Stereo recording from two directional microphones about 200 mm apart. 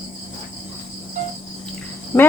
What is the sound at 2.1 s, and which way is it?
Speech, 10° left (ahead or behind).